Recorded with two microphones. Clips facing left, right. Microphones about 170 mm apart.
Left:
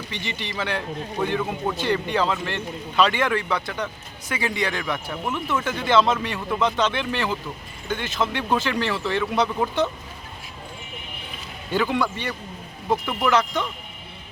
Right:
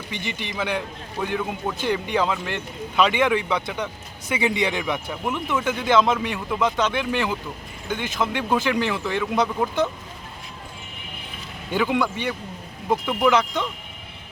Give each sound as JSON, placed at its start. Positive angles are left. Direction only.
{"t": 0.1, "sound": "speech", "side_deg": -10}
{"t": 9.2, "sound": "speech", "side_deg": 0}
{"t": 11.7, "sound": "speech", "side_deg": -15}